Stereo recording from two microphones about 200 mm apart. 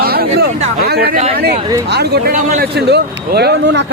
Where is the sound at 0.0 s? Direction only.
50° right (ahead or behind).